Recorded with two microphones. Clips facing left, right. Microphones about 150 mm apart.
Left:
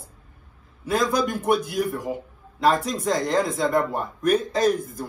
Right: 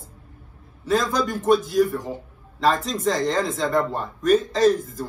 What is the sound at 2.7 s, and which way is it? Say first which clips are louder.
A man's voice: even; centre (ahead or behind).